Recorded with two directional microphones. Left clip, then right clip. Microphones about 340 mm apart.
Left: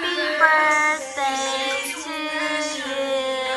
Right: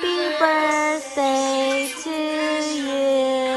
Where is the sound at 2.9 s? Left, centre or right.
Right.